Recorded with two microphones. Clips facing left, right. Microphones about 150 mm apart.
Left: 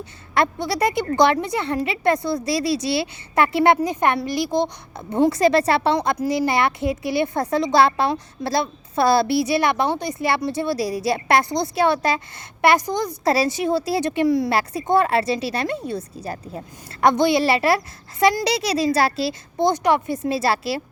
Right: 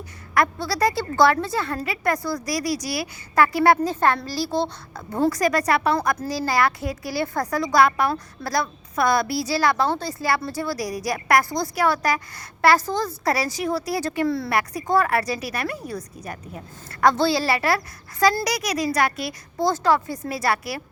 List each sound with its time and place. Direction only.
0.0 s a woman's voice: 25° left (ahead or behind)
14.5 s a woman's voice: 25° left (ahead or behind)